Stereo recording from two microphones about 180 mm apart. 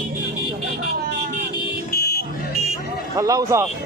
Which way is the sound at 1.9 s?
60° left (ahead or behind).